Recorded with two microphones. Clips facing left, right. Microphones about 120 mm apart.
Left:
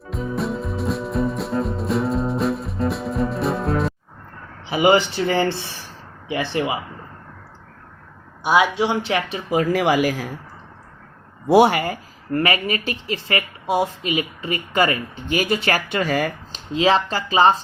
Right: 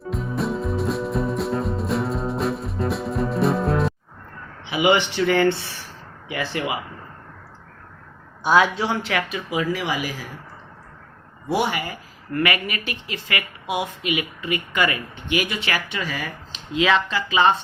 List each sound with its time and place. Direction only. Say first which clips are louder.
0.0 s music: left 1 dB; centre (ahead or behind)
4.6 s a man's voice: left 3 dB; 40° left (ahead or behind)
5.2 s speech: right 1 dB; 30° left (ahead or behind)
8.4 s speech: left 1 dB; 10° left (ahead or behind)
9.5 s speech: left 8 dB; 50° left (ahead or behind)
11.5 s speech: left 9 dB; 45° left (ahead or behind)
12.3 s speech: left 3 dB; 35° left (ahead or behind); by 16.6 s 50° left (ahead or behind)
16.7 s speech: left 2 dB; 35° left (ahead or behind)